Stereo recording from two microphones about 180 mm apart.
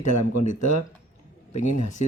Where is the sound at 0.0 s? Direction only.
45° left (ahead or behind).